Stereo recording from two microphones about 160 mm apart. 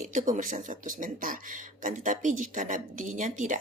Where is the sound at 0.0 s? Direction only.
50° right (ahead or behind).